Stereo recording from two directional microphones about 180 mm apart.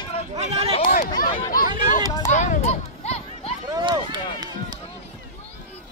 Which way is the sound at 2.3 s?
40° left (ahead or behind).